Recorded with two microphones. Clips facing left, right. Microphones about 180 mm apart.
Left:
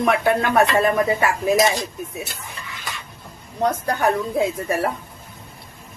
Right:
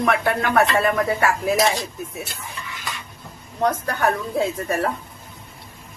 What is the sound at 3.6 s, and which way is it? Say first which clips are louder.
A woman's voice: left 1 dB; 15° left (ahead or behind).